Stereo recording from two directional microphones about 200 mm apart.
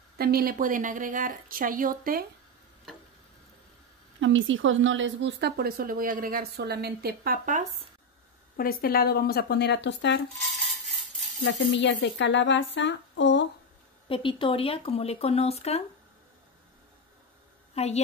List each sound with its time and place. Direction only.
0.2 s speech: 50° right (ahead or behind)
4.2 s speech: 70° right (ahead or behind); by 7.6 s 45° right (ahead or behind)
8.5 s speech: 50° left (ahead or behind)
11.4 s speech: 65° left (ahead or behind)
14.0 s speech: 25° left (ahead or behind)
17.7 s a woman's voice: 30° left (ahead or behind)